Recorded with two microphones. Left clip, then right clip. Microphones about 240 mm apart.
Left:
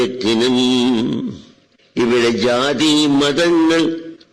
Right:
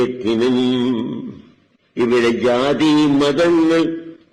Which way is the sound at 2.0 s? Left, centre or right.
Left.